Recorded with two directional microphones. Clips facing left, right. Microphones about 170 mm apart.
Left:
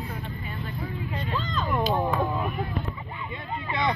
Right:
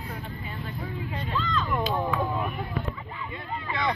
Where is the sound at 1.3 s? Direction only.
40° left (ahead or behind).